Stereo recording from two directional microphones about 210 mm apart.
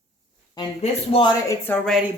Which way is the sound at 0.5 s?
25° left (ahead or behind).